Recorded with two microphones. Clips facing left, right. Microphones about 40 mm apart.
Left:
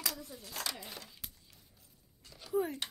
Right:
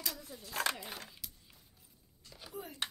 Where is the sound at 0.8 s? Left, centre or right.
Right.